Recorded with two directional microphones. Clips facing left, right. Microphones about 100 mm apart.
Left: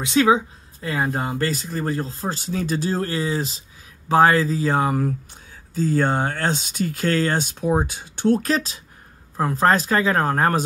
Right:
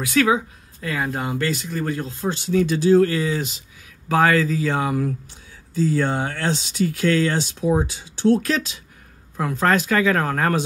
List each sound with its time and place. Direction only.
0.0 s speech: 25° left (ahead or behind)